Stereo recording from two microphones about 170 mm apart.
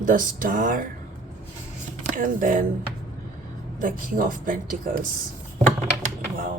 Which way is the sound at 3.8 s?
50° right (ahead or behind).